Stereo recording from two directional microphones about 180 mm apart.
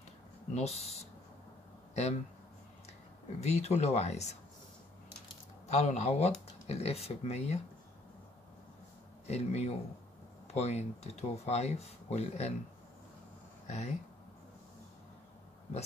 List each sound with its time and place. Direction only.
0.6 s speech: 35° left (ahead or behind)
3.3 s speech: 35° left (ahead or behind)
5.7 s speech: 40° left (ahead or behind)
9.3 s speech: 35° left (ahead or behind)
13.7 s speech: 40° left (ahead or behind)